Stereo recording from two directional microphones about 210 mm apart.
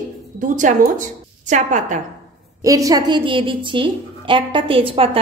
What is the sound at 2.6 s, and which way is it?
A woman's voice, 15° right (ahead or behind).